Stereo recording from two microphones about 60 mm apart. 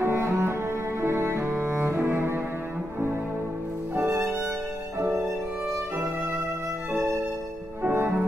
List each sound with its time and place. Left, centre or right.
0.0 s cello: right
6.9 s music: centre
7.8 s music: right